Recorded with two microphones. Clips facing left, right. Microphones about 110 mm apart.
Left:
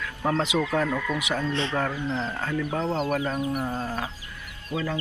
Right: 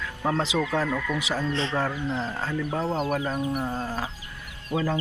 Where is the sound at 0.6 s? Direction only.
Centre (ahead or behind).